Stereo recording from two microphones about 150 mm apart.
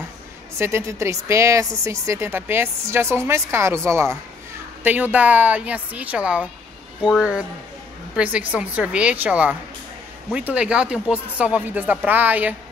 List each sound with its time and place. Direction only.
0.6 s a woman's voice: 15° right (ahead or behind)